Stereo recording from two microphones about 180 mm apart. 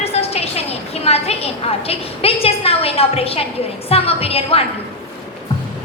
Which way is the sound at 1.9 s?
35° left (ahead or behind).